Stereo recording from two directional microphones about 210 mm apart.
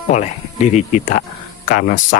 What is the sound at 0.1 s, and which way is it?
Speech, 35° left (ahead or behind).